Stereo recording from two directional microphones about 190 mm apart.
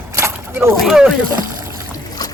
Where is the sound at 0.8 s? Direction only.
Centre (ahead or behind).